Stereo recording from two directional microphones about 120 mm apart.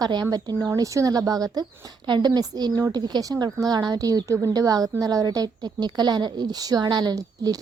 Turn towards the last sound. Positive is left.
turn(degrees=-30)  # may be behind; listen again after turning